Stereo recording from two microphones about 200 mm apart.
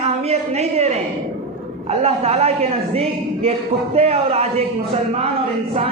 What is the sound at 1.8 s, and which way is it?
A man's voice, 30° right (ahead or behind).